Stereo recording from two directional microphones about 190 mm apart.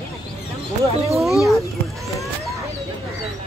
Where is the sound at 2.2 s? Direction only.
Centre (ahead or behind).